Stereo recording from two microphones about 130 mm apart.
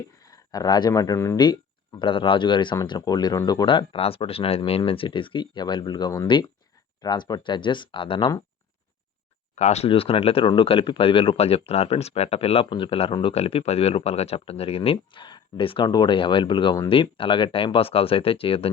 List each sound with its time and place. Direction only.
0.2 s speech: 30° left (ahead or behind)
1.4 s speech: 35° left (ahead or behind)
9.6 s speech: 55° left (ahead or behind)